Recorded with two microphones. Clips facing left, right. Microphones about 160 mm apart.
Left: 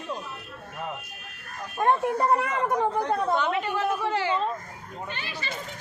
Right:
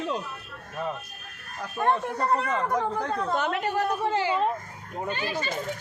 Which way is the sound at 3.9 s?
25° right (ahead or behind).